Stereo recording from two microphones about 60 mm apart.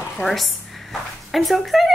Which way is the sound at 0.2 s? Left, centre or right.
Centre.